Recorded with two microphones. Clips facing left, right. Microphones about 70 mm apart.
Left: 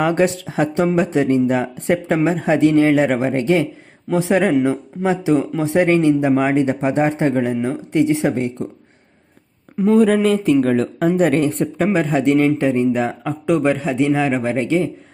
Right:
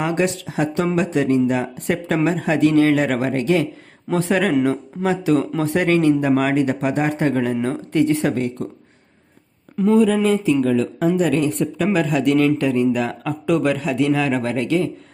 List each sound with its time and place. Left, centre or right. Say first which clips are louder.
0.0 s speech: left 4 dB; left
4.1 s speech: left 2 dB; centre
7.6 s speech: left 1 dB; centre
9.9 s speech: left 2 dB; left